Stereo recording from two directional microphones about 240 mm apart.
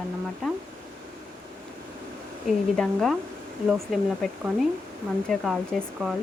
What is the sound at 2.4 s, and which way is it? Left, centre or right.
Speech, centre.